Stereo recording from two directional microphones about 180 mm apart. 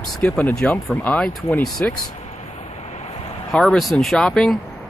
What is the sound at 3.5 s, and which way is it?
Speech, centre (ahead or behind).